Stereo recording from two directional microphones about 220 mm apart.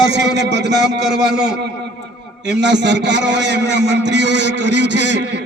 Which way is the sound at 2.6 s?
55° right (ahead or behind).